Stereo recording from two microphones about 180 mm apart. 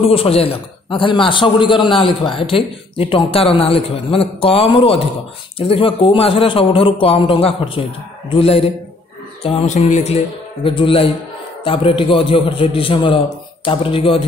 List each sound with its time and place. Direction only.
0.1 s a man's voice: 30° left (ahead or behind)